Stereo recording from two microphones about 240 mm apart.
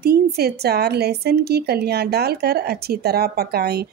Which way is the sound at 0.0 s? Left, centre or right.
Right.